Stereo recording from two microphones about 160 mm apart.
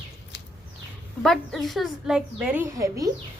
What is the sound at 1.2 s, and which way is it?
A woman's voice, centre (ahead or behind).